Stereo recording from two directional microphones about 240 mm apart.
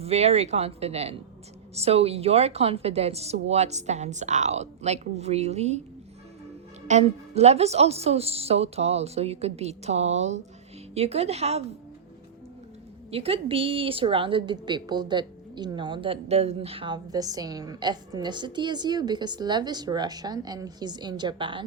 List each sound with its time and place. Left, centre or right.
0.0 s a woman's voice: right
6.8 s a woman's voice: right
13.1 s a woman's voice: right